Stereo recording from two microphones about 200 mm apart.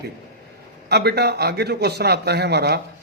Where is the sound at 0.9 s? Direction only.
55° right (ahead or behind).